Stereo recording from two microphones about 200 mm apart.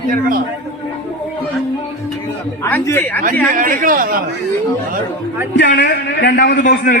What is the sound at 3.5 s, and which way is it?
Speech, 40° right (ahead or behind).